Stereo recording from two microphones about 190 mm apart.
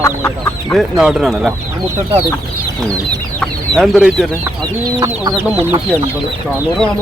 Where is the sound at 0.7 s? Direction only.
5° right (ahead or behind).